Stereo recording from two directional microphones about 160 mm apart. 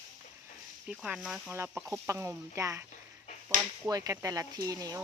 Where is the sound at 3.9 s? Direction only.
20° right (ahead or behind).